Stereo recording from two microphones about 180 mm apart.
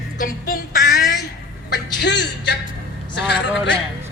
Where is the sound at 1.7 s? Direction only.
80° left.